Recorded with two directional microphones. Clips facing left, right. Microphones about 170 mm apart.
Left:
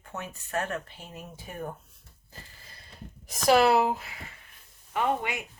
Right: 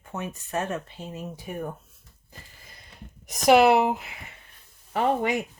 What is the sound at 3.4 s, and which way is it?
Speech, 20° right (ahead or behind).